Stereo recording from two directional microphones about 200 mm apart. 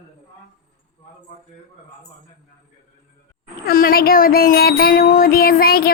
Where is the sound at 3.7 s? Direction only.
45° left (ahead or behind).